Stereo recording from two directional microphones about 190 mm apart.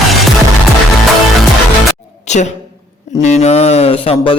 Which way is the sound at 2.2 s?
35° left (ahead or behind).